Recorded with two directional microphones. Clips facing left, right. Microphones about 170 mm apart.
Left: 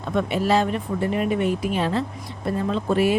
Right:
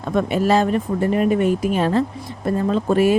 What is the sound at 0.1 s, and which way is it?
Speech, 45° right (ahead or behind).